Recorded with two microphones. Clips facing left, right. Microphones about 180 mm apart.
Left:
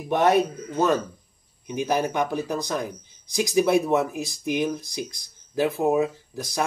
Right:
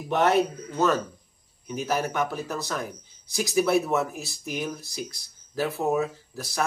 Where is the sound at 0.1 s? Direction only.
15° left (ahead or behind).